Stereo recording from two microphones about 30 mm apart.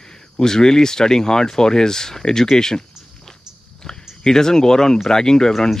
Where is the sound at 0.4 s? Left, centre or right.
Centre.